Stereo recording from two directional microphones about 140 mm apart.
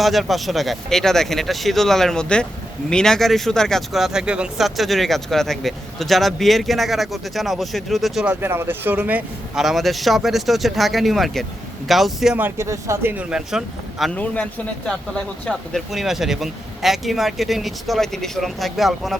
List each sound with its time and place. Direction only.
0.0 s speech: centre (ahead or behind)
12.4 s speech: 15° right (ahead or behind)
13.3 s speech: 5° right (ahead or behind)
15.4 s speech: centre (ahead or behind)